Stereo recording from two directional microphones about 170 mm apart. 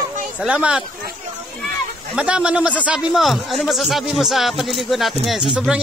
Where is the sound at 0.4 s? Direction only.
5° right (ahead or behind).